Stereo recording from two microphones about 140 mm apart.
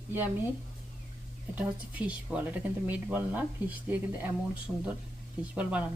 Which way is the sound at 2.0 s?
10° right (ahead or behind).